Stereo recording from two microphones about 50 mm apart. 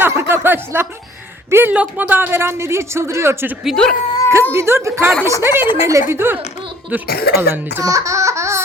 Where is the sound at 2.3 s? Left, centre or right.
Right.